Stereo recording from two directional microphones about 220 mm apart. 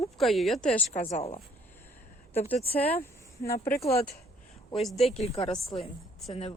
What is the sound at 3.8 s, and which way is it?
Speech, 15° left (ahead or behind).